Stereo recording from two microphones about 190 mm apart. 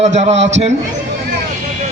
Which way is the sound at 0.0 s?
35° right (ahead or behind).